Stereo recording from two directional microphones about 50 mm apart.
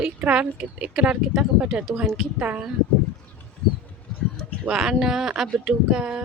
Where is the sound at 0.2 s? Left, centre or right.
Right.